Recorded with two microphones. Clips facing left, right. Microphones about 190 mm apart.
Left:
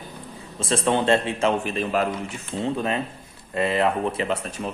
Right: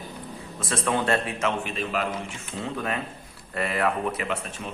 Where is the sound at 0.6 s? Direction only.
25° left (ahead or behind).